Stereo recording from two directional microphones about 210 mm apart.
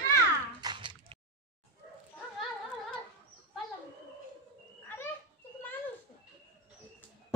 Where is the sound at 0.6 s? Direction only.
20° right (ahead or behind).